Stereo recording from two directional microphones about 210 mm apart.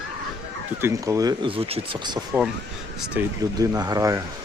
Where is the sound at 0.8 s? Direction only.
15° right (ahead or behind).